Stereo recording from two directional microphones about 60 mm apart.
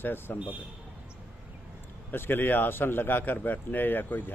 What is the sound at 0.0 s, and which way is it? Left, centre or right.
Speech, left.